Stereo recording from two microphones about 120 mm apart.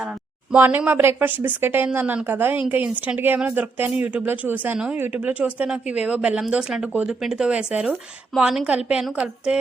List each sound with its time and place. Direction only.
0.5 s speech: 15° right (ahead or behind)